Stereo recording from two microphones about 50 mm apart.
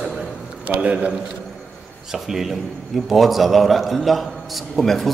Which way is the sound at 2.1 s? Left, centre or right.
Centre.